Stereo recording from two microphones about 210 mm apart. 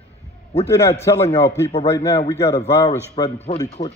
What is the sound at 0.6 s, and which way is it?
Music, 15° left (ahead or behind).